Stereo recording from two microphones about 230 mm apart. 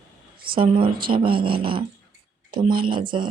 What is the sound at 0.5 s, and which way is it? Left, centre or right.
Speech, right.